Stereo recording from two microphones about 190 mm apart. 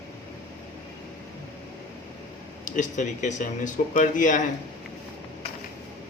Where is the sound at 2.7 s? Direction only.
40° left (ahead or behind).